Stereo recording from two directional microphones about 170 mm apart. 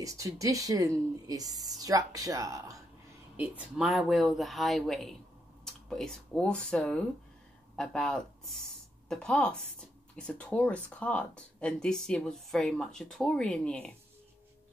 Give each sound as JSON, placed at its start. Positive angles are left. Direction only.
{"t": 0.0, "sound": "speech", "side_deg": -20}
{"t": 3.3, "sound": "speech", "side_deg": -5}